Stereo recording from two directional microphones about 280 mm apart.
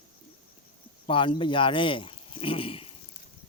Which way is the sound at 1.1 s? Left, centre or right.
Centre.